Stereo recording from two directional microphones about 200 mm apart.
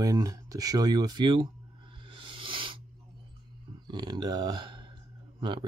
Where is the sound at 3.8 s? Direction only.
20° right (ahead or behind).